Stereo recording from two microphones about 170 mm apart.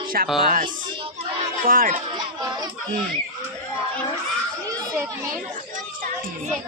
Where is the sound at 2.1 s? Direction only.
25° right (ahead or behind).